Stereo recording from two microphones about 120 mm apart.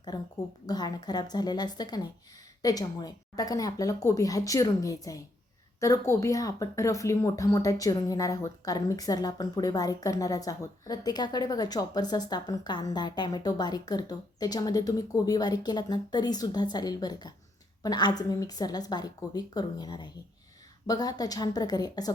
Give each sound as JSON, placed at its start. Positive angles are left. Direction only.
{"t": 0.1, "sound": "speech", "side_deg": 35}